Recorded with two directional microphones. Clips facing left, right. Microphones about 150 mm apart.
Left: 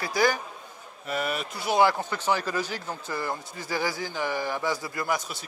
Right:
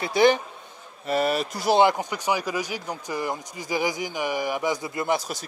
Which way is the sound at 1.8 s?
20° right (ahead or behind).